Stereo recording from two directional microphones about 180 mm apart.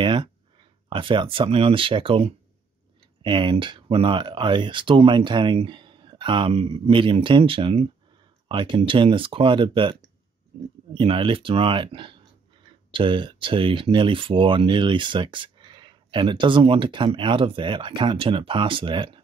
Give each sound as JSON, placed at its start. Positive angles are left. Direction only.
{"t": 0.0, "sound": "a sound", "side_deg": -25}
{"t": 0.8, "sound": "speech", "side_deg": -25}
{"t": 11.0, "sound": "speech", "side_deg": -30}